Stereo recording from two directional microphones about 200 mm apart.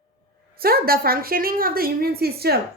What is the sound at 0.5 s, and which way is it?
A woman's voice, 50° right (ahead or behind).